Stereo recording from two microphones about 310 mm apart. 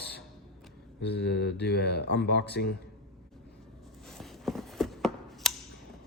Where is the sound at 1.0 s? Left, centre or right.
Left.